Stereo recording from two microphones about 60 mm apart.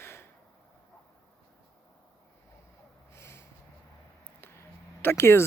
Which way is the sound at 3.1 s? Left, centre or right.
Left.